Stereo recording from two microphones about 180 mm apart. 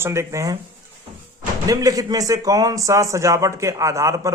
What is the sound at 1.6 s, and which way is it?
Speech, 20° right (ahead or behind).